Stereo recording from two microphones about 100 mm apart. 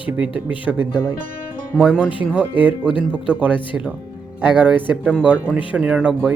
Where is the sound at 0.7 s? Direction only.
5° right (ahead or behind).